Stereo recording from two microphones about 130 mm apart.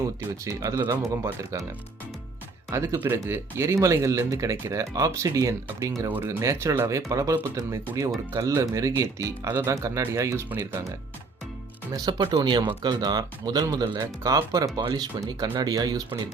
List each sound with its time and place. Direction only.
0.0 s speech: 25° right (ahead or behind)
2.6 s speech: 25° right (ahead or behind)
11.9 s speech: 30° right (ahead or behind)